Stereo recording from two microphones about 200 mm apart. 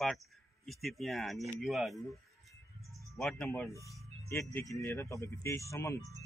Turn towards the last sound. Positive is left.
turn(degrees=15)  # may be behind; listen again after turning